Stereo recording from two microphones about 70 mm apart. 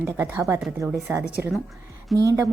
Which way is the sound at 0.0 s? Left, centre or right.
Right.